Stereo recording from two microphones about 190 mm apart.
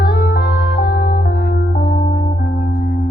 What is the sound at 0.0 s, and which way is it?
Music, 55° left (ahead or behind).